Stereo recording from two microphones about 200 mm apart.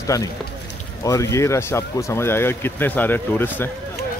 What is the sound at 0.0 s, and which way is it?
Speech, 15° left (ahead or behind).